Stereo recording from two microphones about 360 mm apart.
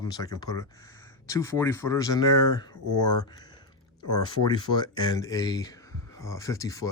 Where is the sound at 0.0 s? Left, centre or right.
Centre.